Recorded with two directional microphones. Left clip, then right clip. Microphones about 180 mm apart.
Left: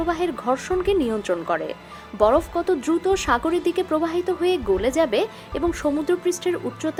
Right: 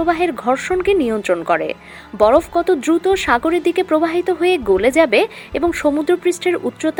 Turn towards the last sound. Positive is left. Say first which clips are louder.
# right 7 dB
turn(degrees=-20)  # may be behind; listen again after turning